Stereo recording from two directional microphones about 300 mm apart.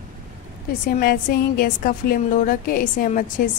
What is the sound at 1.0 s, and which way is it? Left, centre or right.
A woman's voice, left.